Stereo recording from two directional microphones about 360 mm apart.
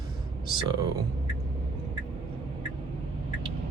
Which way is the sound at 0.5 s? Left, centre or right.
Centre.